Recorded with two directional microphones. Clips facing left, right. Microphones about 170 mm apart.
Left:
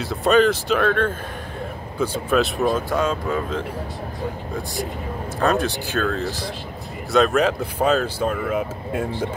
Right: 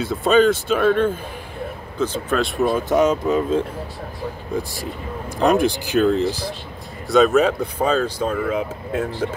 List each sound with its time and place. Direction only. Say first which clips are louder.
0.0 s speech: right 1 dB; centre (ahead or behind)
2.0 s speech: left 1 dB; 5° left (ahead or behind)
2.7 s speech: right 4 dB; 20° right (ahead or behind)
5.4 s speech: right 4 dB; 15° right (ahead or behind)
7.1 s speech: right 3 dB; centre (ahead or behind)